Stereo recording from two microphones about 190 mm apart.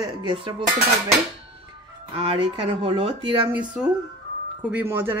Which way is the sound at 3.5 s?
5° right (ahead or behind).